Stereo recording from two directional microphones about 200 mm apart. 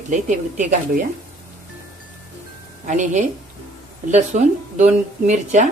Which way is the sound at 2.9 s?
40° right (ahead or behind).